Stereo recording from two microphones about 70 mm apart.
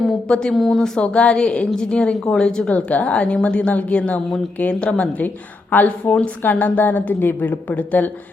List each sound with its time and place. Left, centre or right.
0.3 s a woman's voice: centre
1.0 s a woman's voice: centre
2.6 s a woman's voice: centre